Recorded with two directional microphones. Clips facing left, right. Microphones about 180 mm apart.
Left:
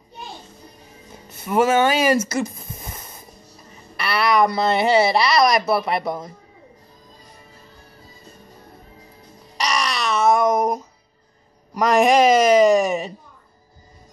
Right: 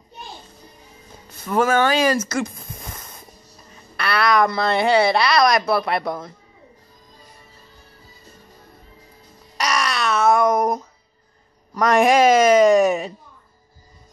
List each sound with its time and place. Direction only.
1.6 s speech: 25° left (ahead or behind)
1.9 s speech: 10° left (ahead or behind)
3.9 s a woman's voice: centre (ahead or behind)
9.6 s babbling: centre (ahead or behind)
11.8 s a woman's voice: centre (ahead or behind)